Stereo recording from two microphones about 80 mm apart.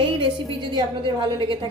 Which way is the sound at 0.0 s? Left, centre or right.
Right.